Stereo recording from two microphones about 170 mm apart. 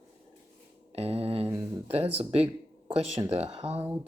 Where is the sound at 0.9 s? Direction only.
35° right (ahead or behind).